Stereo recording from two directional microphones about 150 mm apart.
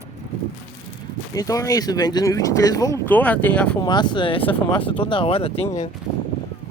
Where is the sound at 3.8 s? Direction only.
30° left (ahead or behind).